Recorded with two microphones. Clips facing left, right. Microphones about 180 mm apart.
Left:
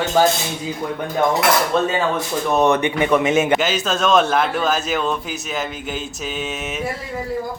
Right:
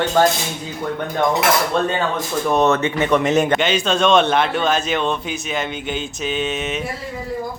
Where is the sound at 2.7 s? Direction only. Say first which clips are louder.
Even; 15° left (ahead or behind).